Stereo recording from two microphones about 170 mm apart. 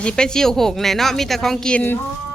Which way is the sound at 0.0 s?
5° left (ahead or behind).